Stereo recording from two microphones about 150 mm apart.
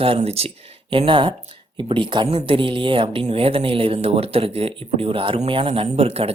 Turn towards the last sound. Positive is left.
turn(degrees=-40)  # may be behind; listen again after turning